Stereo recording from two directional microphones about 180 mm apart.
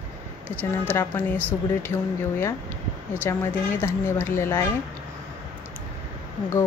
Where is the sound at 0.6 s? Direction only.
10° left (ahead or behind).